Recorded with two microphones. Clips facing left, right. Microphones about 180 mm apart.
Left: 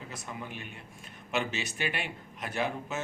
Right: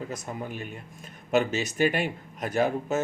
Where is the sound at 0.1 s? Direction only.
45° right (ahead or behind).